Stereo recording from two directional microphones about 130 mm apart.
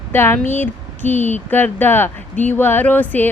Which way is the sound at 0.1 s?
15° left (ahead or behind).